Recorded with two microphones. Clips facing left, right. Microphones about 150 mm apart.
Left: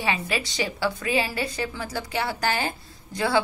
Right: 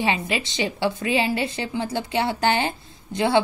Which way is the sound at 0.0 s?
25° right (ahead or behind).